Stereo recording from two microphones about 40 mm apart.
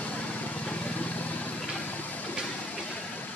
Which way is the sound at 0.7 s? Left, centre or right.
Left.